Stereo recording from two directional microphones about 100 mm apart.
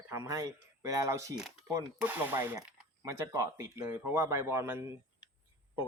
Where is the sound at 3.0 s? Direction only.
35° right (ahead or behind).